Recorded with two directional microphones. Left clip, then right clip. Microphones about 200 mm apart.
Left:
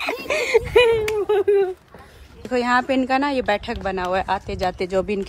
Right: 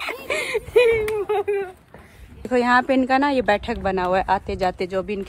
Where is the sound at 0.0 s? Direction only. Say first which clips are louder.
Left 3 dB; 10° left (ahead or behind).